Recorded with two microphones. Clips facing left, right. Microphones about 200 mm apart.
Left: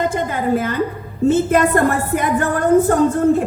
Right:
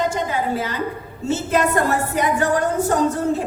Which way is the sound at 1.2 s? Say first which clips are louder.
Left 6 dB; 55° left (ahead or behind).